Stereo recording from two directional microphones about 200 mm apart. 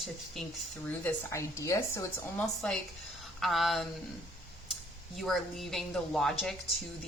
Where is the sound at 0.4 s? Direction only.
Centre (ahead or behind).